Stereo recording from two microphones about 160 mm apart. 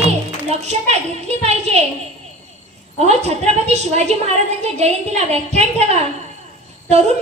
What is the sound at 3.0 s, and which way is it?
A woman's voice, 45° right (ahead or behind).